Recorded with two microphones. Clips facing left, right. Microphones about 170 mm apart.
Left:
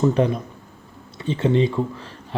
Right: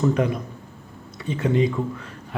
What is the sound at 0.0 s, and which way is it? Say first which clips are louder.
A man's voice: left 2 dB; 30° left (ahead or behind).